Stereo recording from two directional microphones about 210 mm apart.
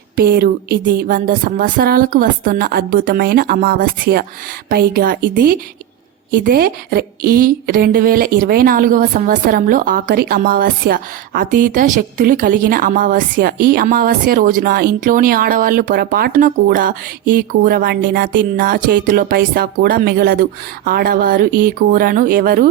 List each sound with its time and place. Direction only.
0.2 s a woman's voice: 45° right (ahead or behind)